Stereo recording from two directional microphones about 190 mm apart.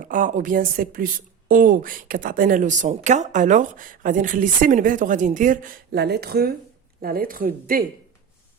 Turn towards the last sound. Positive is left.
turn(degrees=-45)  # may be behind; listen again after turning